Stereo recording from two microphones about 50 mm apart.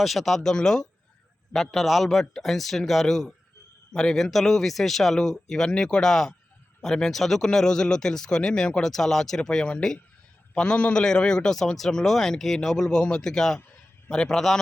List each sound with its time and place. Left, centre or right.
0.0 s speech: centre